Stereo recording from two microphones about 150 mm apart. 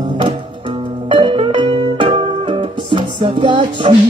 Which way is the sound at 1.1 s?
35° right (ahead or behind).